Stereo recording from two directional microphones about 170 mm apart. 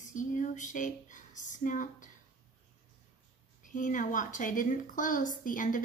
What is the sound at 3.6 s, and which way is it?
Speech, 50° left (ahead or behind).